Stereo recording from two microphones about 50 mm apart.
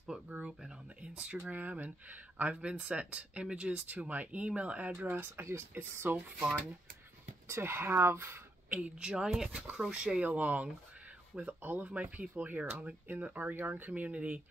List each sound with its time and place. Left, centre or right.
0.4 s speech: centre
3.8 s speech: right
4.9 s speech: right
5.8 s speech: right
7.4 s speech: right
8.6 s speech: right
8.9 s speech: centre